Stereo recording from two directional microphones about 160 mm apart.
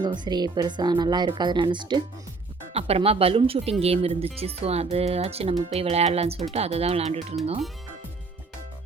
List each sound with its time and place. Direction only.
0.0 s speech: 25° right (ahead or behind)